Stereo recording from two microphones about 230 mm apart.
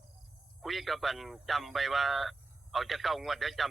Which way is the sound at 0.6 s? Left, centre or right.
Centre.